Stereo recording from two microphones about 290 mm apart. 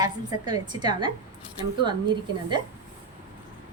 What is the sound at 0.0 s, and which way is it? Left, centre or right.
A woman's voice, centre.